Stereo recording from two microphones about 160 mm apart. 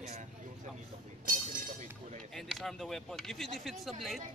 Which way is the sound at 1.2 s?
60° right (ahead or behind).